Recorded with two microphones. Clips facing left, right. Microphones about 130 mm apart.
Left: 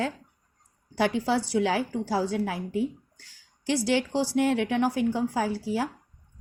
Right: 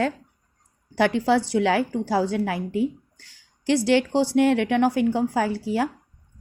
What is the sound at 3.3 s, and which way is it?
Speech, 65° right (ahead or behind).